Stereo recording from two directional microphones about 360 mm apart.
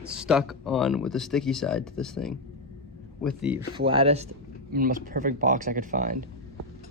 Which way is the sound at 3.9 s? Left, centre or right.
Centre.